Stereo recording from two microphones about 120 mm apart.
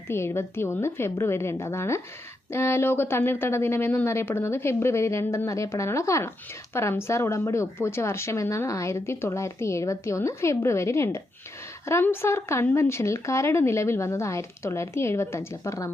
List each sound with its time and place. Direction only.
0.1 s a woman's voice: 20° left (ahead or behind)